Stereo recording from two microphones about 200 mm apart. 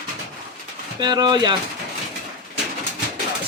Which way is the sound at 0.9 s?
20° right (ahead or behind).